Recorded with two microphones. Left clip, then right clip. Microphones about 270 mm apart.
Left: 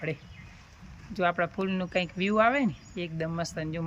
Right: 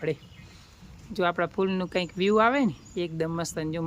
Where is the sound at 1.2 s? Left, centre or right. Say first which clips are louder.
Right 2 dB; centre.